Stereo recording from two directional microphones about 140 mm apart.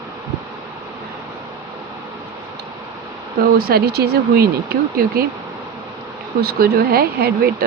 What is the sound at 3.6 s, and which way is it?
Speech, 90° right.